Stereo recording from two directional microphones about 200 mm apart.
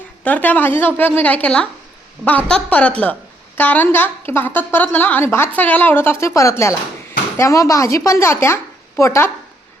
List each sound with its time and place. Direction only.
0.3 s a woman's voice: 10° left (ahead or behind)